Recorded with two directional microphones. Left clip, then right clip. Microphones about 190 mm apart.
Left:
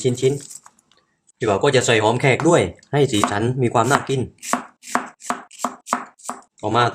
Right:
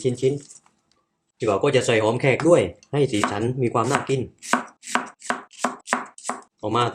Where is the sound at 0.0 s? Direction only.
25° left (ahead or behind).